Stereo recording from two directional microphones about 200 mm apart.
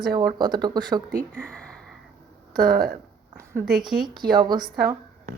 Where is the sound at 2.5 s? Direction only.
50° right (ahead or behind).